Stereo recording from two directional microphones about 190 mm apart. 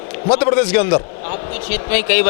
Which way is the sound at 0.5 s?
10° left (ahead or behind).